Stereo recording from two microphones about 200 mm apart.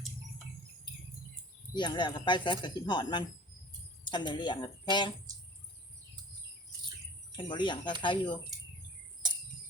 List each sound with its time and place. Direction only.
1.7 s speech: 25° left (ahead or behind)
7.3 s speech: 25° left (ahead or behind)